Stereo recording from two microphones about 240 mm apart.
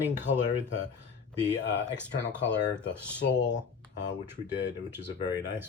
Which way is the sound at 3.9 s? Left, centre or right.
Left.